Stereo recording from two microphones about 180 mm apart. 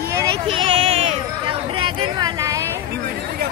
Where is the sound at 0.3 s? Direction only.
30° right (ahead or behind).